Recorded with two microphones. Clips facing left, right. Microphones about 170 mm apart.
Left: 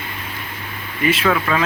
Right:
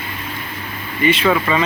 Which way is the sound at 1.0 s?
Centre (ahead or behind).